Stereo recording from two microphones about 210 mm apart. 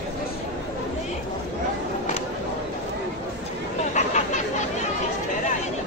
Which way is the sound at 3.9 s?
35° left (ahead or behind).